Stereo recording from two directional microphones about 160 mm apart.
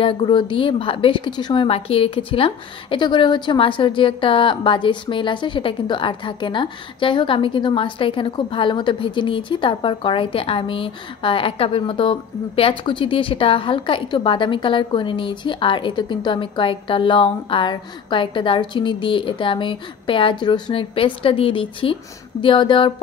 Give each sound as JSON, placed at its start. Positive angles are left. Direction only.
{"t": 0.0, "sound": "a woman's voice", "side_deg": 30}